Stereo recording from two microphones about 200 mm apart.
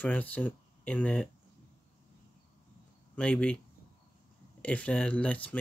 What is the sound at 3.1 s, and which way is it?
Speech, 5° left (ahead or behind).